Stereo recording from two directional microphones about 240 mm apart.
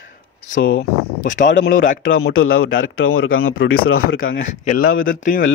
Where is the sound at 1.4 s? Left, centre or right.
Left.